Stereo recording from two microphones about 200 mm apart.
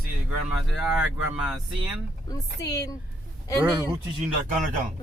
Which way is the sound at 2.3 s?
15° left (ahead or behind).